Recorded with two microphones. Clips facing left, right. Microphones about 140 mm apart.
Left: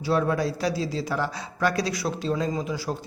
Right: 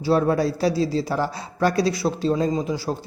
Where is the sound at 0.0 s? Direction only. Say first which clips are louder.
Right 4 dB; 35° right (ahead or behind).